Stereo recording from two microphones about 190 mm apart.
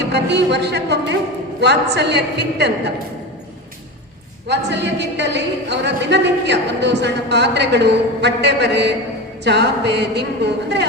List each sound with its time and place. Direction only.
0.0 s a woman's voice: 60° right (ahead or behind)
4.4 s a woman's voice: 65° right (ahead or behind)